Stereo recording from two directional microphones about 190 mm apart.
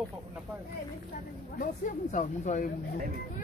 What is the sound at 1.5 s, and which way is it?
Speech, 45° left (ahead or behind).